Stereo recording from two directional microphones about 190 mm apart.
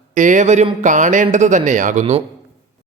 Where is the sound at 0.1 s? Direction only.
40° right (ahead or behind).